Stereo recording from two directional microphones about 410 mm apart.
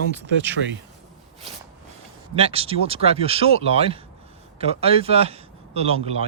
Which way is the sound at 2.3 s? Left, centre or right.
Centre.